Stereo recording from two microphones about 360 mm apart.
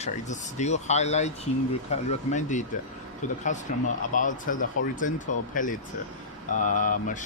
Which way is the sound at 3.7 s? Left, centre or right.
Left.